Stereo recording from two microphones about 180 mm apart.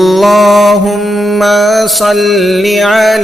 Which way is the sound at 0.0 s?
Centre (ahead or behind).